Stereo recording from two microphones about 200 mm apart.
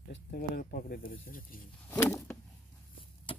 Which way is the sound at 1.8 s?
10° left (ahead or behind).